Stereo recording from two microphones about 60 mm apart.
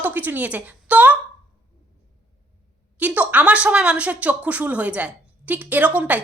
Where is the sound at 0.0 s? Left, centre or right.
Right.